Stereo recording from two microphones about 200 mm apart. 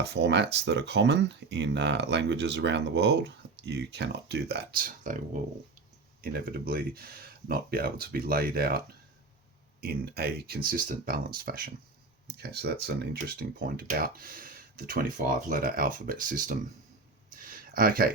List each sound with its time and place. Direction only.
0.0 s speech: 60° right (ahead or behind)
9.8 s speech: 50° right (ahead or behind)
17.3 s a sound: 45° right (ahead or behind)